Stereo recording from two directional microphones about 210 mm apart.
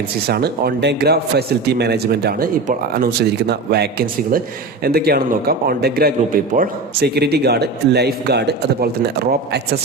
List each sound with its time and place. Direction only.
0.3 s speech: 50° right (ahead or behind)